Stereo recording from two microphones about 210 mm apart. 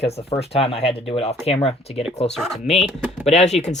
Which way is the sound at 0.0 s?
30° left (ahead or behind).